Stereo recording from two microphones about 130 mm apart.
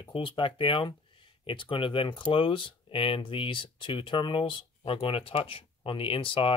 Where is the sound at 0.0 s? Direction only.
40° left (ahead or behind).